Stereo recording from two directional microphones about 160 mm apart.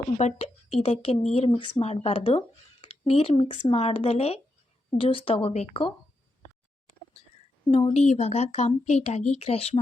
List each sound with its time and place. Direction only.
0.2 s speech: 45° left (ahead or behind)
7.7 s speech: 40° left (ahead or behind)